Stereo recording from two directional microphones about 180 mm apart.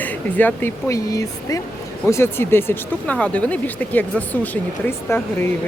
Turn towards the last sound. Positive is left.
turn(degrees=15)  # may be behind; listen again after turning